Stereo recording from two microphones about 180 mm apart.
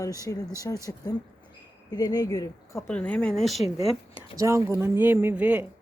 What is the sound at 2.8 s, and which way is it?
Speech, 10° left (ahead or behind).